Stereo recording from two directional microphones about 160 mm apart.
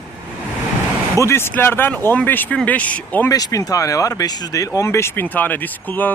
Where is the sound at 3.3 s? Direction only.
25° left (ahead or behind).